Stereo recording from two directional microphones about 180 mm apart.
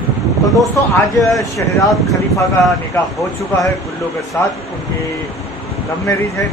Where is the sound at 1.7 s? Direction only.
Centre (ahead or behind).